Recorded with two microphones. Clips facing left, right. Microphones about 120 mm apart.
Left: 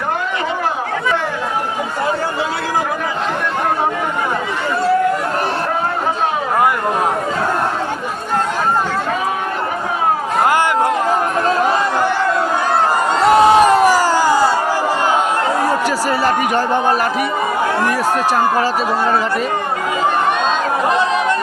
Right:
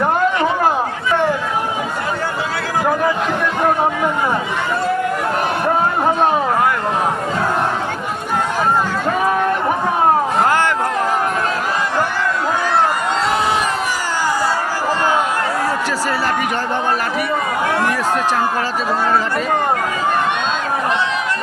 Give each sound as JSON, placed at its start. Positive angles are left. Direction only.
{"t": 13.2, "sound": "crowd", "side_deg": 45}